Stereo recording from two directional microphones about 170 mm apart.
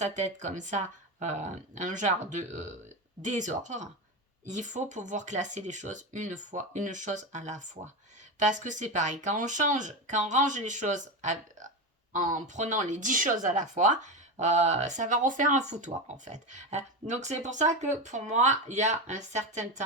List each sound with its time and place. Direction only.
0.0 s speech: 45° right (ahead or behind)